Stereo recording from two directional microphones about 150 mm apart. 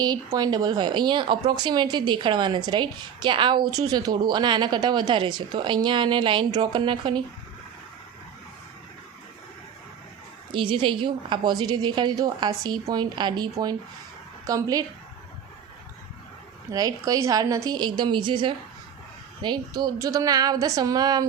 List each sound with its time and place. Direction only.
0.0 s speech: 25° right (ahead or behind)
10.5 s speech: 35° right (ahead or behind)
16.7 s speech: 25° right (ahead or behind)